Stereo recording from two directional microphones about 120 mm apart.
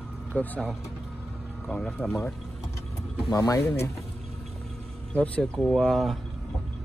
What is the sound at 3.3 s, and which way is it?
Speech, 30° left (ahead or behind).